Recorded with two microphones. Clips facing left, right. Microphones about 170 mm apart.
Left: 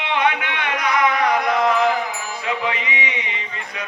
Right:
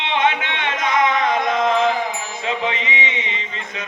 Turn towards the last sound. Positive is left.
turn(degrees=-20)  # may be behind; listen again after turning